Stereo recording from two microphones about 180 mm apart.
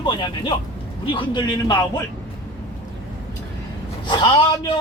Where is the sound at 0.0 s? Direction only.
25° left (ahead or behind).